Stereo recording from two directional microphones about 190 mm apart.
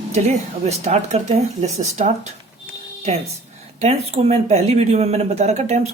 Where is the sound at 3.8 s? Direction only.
35° right (ahead or behind).